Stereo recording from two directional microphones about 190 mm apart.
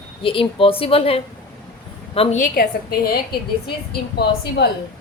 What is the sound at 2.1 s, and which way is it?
A woman's voice, 40° left (ahead or behind).